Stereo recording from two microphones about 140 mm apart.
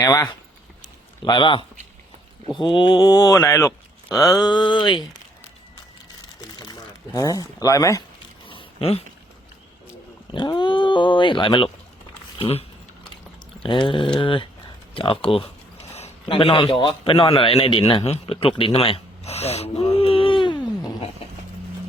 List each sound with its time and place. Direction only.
0.0 s speech: 25° left (ahead or behind)
6.6 s speech: 30° left (ahead or behind)
8.4 s a sound: 40° left (ahead or behind)
10.3 s a man's voice: 35° left (ahead or behind)